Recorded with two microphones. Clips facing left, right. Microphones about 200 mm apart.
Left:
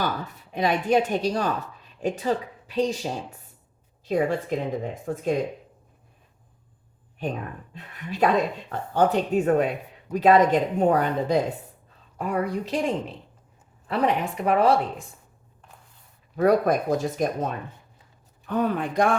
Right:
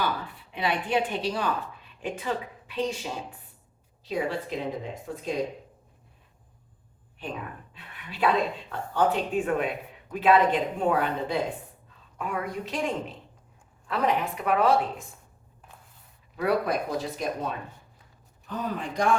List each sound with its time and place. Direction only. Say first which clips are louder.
0.0 s speech: left 2 dB; 45° left (ahead or behind)
4.1 s a woman's voice: left 5 dB; 50° left (ahead or behind)
7.2 s speech: left 6 dB; 45° left (ahead or behind)
16.3 s a woman's voice: left 6 dB; 45° left (ahead or behind)
18.4 s speech: left 7 dB; 60° left (ahead or behind)